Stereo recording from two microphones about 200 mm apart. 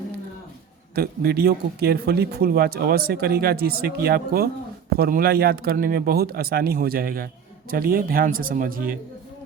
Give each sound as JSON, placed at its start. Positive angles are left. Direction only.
{"t": 0.9, "sound": "speech", "side_deg": -50}